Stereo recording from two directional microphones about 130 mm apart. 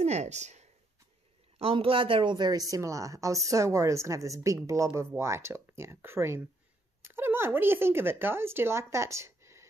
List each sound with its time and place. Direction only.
0.0 s speech: 60° right (ahead or behind)
1.6 s a woman's voice: 45° right (ahead or behind); by 9.7 s 20° right (ahead or behind)